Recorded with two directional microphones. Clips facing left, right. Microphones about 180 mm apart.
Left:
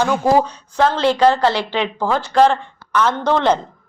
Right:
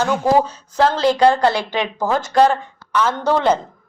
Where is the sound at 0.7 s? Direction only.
40° right (ahead or behind).